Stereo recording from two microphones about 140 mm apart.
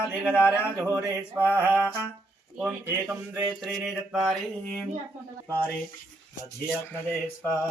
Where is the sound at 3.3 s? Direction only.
15° right (ahead or behind).